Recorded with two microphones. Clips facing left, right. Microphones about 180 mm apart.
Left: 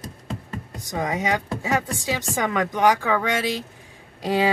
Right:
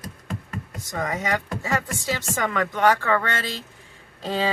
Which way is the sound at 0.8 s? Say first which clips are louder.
Left 3 dB; 20° left (ahead or behind).